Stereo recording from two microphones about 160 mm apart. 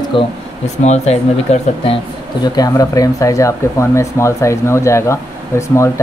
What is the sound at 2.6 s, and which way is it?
Speech, 20° left (ahead or behind).